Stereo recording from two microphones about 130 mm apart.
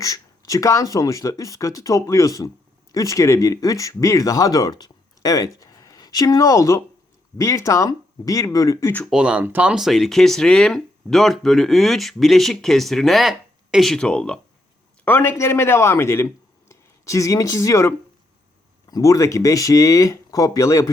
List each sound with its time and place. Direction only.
0.0 s speech: 25° left (ahead or behind)
9.0 s a man's voice: 5° right (ahead or behind); by 20.9 s 25° left (ahead or behind)